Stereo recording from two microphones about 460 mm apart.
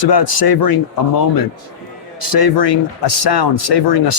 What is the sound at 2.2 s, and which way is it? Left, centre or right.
Speech, left.